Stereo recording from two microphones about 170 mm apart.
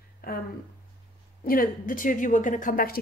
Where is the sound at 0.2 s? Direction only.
60° left (ahead or behind).